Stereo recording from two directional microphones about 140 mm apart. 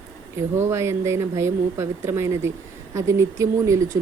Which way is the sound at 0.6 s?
20° right (ahead or behind).